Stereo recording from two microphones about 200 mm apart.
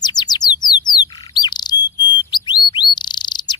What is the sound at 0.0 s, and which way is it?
Bird, 20° left (ahead or behind).